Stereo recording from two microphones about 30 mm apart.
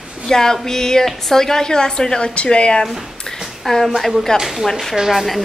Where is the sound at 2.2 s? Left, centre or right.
Left.